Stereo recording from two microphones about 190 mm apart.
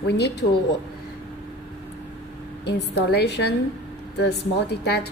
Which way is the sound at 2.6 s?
60° left (ahead or behind).